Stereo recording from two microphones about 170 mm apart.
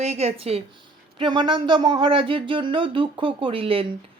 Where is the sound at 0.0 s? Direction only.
40° right (ahead or behind).